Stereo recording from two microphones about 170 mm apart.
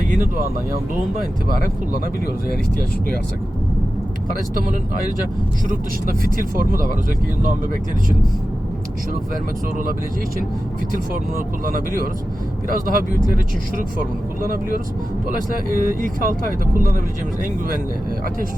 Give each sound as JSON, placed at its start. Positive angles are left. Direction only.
{"t": 5.6, "sound": "speech", "side_deg": -55}
{"t": 10.9, "sound": "speech", "side_deg": -55}